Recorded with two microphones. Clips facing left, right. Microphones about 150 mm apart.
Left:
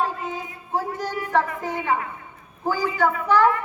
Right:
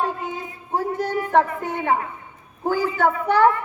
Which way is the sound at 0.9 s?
55° right (ahead or behind).